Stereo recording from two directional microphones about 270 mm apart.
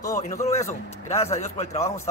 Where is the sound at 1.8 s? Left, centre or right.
Centre.